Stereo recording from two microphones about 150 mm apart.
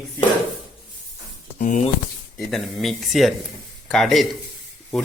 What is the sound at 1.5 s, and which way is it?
Speech, 60° left (ahead or behind).